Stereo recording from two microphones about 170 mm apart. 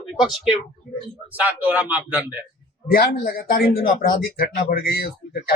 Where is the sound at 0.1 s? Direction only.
Centre (ahead or behind).